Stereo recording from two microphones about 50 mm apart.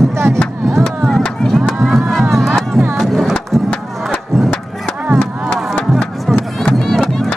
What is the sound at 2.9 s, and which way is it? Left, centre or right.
Music, centre.